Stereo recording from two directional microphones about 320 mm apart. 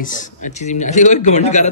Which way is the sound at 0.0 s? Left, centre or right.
Left.